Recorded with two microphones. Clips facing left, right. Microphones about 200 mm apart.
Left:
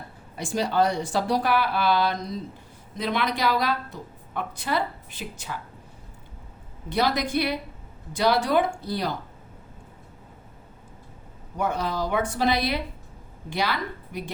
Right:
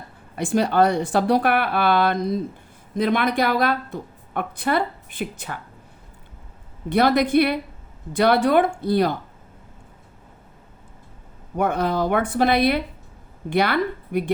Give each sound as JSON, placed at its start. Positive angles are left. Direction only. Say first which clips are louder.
{"t": 0.3, "sound": "a woman's voice", "louder": "right 5 dB", "side_deg": -55}
{"t": 6.9, "sound": "a woman's voice", "louder": "right 7 dB", "side_deg": -55}
{"t": 11.5, "sound": "a woman's voice", "louder": "right 5 dB", "side_deg": -55}